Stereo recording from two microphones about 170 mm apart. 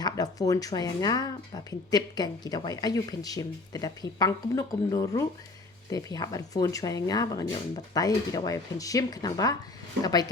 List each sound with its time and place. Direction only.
0.0 s speech: 20° left (ahead or behind)